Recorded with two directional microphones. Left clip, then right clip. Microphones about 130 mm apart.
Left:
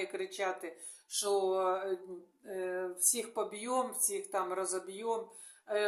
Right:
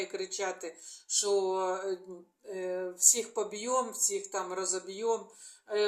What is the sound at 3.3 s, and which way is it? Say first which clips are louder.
Speech: right 3 dB; 35° left (ahead or behind).